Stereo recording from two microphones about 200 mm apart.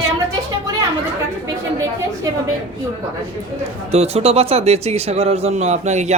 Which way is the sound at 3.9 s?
30° right (ahead or behind).